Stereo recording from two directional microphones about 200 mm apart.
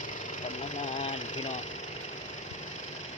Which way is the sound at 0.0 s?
40° left (ahead or behind).